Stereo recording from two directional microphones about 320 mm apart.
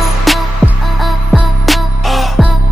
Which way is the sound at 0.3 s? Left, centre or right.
Centre.